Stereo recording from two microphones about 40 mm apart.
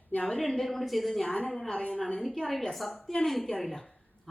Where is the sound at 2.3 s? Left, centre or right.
Centre.